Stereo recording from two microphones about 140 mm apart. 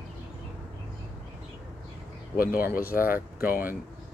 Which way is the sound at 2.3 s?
90° left.